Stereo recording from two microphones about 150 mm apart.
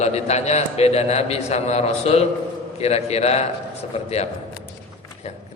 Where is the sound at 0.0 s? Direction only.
45° left (ahead or behind).